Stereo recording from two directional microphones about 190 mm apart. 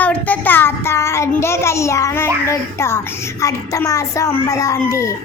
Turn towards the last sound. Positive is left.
turn(degrees=15)  # may be behind; listen again after turning